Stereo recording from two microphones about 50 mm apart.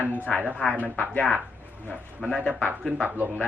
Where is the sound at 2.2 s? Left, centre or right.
Centre.